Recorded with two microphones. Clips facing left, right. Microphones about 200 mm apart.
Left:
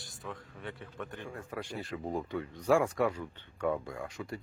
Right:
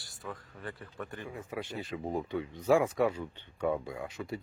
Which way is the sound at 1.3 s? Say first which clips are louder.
Right 1 dB; 20° right (ahead or behind).